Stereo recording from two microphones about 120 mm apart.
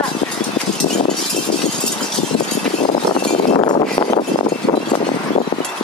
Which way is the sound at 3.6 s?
40° left (ahead or behind).